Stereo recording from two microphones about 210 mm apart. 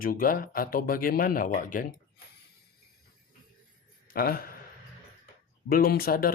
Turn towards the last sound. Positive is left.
turn(degrees=45)  # may be behind; listen again after turning